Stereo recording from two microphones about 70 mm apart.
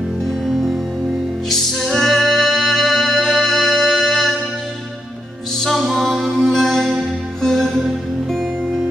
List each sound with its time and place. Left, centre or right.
1.5 s music: centre
5.6 s music: centre